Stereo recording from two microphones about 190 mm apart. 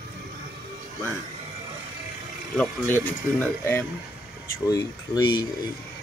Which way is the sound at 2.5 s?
10° left (ahead or behind).